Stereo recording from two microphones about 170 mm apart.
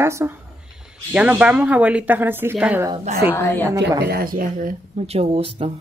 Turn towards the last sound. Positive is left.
turn(degrees=-35)  # may be behind; listen again after turning